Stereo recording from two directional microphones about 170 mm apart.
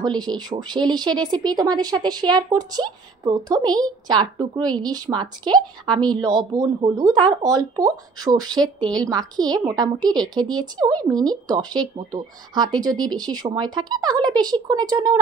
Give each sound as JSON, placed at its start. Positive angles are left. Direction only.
{"t": 0.0, "sound": "speech", "side_deg": -25}